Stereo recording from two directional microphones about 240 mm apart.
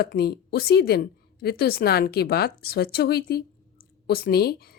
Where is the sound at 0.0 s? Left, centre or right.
Left.